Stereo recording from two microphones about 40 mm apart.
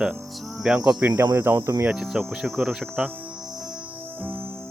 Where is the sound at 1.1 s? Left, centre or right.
Right.